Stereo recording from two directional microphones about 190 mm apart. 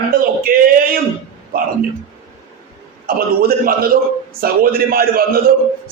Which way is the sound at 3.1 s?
50° right (ahead or behind).